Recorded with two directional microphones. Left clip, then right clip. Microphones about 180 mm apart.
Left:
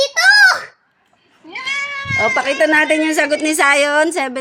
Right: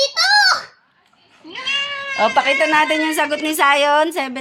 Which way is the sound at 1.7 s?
5° left (ahead or behind).